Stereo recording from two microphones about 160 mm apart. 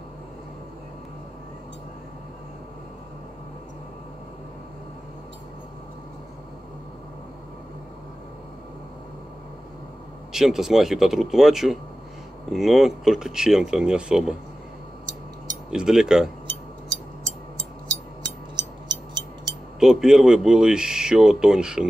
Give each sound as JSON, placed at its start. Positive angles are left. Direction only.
{"t": 10.3, "sound": "speech", "side_deg": -5}
{"t": 15.7, "sound": "speech", "side_deg": -5}
{"t": 18.6, "sound": "music", "side_deg": -30}
{"t": 19.8, "sound": "speech", "side_deg": -5}